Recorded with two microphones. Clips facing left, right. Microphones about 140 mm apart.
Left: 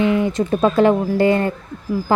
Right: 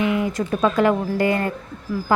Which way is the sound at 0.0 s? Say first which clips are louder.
Left 4 dB; 30° left (ahead or behind).